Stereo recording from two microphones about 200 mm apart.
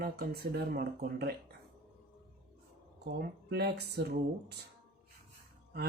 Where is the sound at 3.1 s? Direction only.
55° right (ahead or behind).